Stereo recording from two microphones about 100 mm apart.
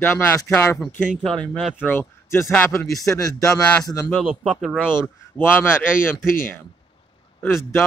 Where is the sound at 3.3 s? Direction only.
35° left (ahead or behind).